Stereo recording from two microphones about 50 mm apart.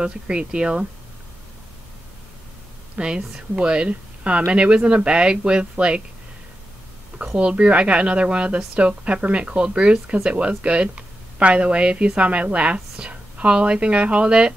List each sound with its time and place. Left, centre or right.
0.0 s speech: centre
3.0 s a woman's voice: centre
7.3 s a woman's voice: right